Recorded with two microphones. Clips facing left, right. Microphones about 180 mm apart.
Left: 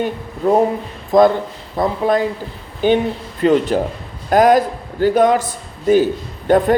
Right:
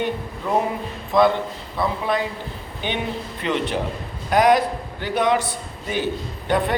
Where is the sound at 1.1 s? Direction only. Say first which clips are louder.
Left 6 dB; 45° left (ahead or behind).